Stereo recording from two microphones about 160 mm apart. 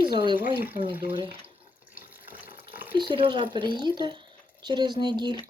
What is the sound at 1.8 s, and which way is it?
Water tap, 10° right (ahead or behind).